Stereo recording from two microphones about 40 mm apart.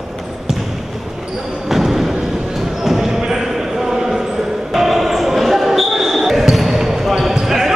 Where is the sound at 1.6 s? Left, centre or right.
Centre.